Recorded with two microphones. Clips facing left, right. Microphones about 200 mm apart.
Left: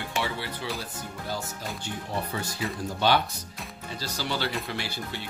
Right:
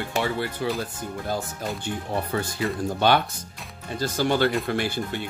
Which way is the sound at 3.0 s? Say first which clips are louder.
Right 2 dB; 55° right (ahead or behind).